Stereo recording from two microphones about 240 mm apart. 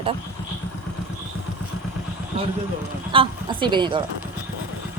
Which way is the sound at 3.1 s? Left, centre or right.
Right.